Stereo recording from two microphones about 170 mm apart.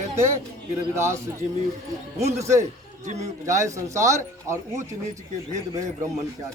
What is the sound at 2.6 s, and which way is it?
Speech, 45° right (ahead or behind).